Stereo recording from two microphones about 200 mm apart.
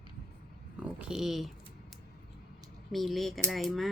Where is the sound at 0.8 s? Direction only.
5° right (ahead or behind).